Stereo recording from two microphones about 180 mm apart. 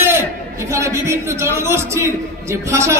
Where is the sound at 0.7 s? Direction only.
15° right (ahead or behind).